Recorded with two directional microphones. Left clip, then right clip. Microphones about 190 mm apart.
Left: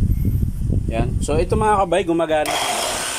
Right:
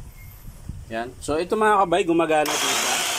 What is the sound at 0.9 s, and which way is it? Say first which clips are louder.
Speech: left 3 dB; 10° left (ahead or behind).